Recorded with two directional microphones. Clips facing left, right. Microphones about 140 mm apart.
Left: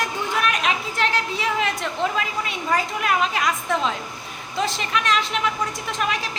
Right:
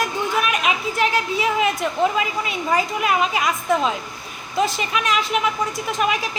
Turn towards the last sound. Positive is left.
turn(degrees=-10)  # may be behind; listen again after turning